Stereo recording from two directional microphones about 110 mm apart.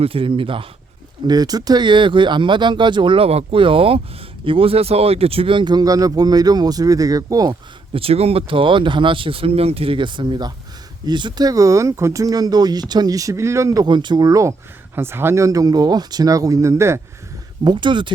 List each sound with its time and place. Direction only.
0.0 s speech: 55° right (ahead or behind)
1.3 s speech: 35° right (ahead or behind)
7.9 s speech: 60° right (ahead or behind); by 14.5 s 30° right (ahead or behind)
14.9 s speech: 20° right (ahead or behind)
17.6 s speech: 45° right (ahead or behind)